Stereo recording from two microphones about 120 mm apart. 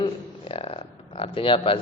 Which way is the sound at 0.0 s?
50° left (ahead or behind).